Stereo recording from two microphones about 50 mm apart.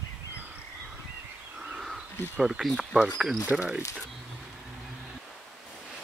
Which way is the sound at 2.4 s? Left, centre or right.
Centre.